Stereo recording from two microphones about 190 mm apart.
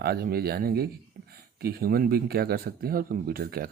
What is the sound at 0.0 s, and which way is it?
Speech, 55° right (ahead or behind).